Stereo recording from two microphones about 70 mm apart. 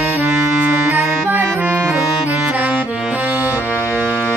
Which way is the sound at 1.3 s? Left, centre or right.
Right.